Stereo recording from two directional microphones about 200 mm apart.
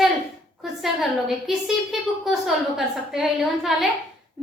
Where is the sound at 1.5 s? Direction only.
Centre (ahead or behind).